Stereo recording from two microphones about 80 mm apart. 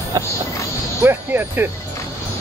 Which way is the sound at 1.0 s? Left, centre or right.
Right.